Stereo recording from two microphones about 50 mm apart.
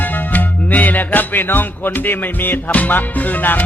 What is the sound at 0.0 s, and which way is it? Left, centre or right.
Music, left.